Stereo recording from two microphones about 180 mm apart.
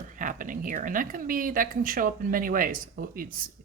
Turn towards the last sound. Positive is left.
turn(degrees=-55)  # may be behind; listen again after turning